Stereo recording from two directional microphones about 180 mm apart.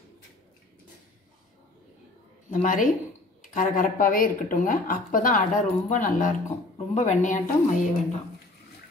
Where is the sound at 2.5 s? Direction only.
45° left (ahead or behind).